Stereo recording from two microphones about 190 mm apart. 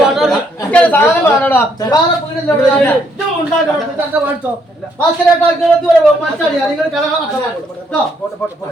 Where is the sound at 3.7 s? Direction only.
5° right (ahead or behind).